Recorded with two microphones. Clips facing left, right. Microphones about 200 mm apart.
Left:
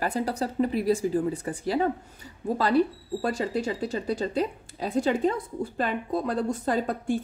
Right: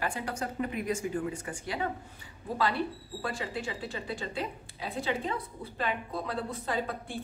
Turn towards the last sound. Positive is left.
turn(degrees=45)  # may be behind; listen again after turning